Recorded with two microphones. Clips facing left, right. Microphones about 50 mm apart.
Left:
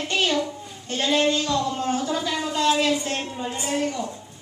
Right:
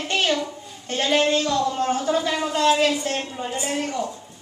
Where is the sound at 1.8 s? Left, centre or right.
Right.